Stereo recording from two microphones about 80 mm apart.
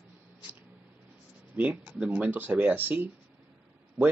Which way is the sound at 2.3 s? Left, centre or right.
Right.